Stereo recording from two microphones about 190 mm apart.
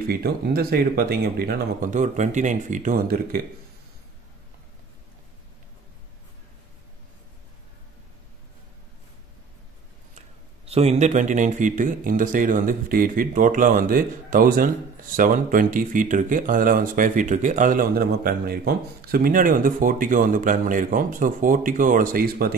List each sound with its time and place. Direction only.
0.1 s speech: 55° right (ahead or behind)
10.6 s speech: 35° right (ahead or behind); by 22.5 s 50° right (ahead or behind)